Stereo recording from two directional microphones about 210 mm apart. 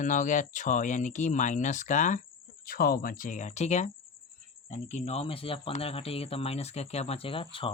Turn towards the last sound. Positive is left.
turn(degrees=25)  # may be behind; listen again after turning